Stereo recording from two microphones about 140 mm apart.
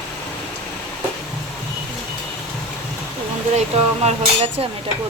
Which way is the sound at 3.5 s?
50° right (ahead or behind).